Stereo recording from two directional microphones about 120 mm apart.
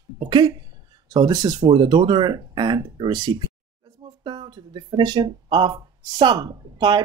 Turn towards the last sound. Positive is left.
turn(degrees=-40)  # may be behind; listen again after turning